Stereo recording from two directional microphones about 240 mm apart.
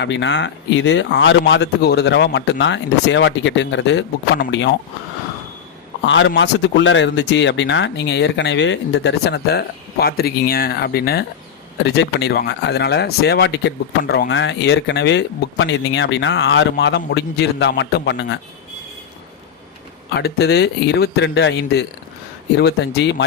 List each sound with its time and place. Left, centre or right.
0.0 s speech: left
6.1 s speech: left
20.1 s speech: left